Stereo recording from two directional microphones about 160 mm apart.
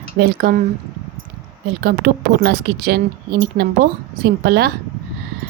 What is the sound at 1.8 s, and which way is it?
A woman's voice, 80° right.